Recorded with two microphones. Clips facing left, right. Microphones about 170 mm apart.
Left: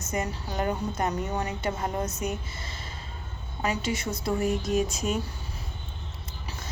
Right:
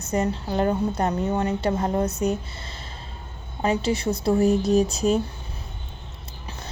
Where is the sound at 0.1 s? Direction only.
30° right (ahead or behind).